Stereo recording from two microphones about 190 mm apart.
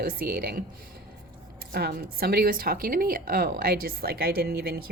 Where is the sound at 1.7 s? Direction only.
55° right (ahead or behind).